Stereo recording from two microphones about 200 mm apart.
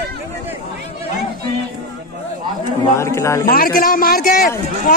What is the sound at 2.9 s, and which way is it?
Speech, 15° left (ahead or behind).